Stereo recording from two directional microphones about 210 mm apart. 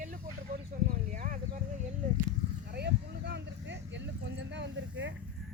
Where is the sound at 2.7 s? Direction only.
50° right (ahead or behind).